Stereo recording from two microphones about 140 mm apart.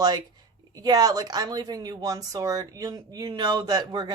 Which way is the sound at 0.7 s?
30° right (ahead or behind).